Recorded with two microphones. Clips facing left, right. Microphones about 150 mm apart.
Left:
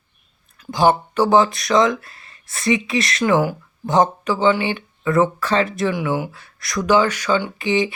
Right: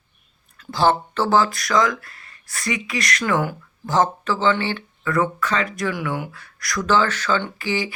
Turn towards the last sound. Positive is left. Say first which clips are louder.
# left 5 dB
turn(degrees=20)  # may be behind; listen again after turning